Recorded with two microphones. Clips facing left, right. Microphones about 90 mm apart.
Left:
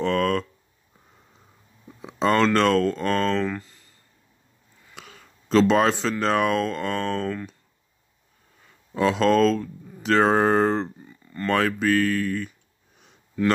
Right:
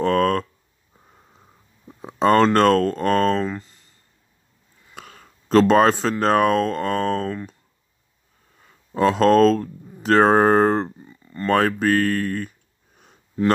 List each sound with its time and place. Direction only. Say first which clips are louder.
0.0 s a sound: right 4 dB; 45° right (ahead or behind)
2.0 s speech: right 4 dB; 45° right (ahead or behind)
3.4 s speech: right 1 dB; 25° right (ahead or behind)
4.9 s speech: right 3 dB; 45° right (ahead or behind)
8.9 s speech: right 4 dB; 40° right (ahead or behind)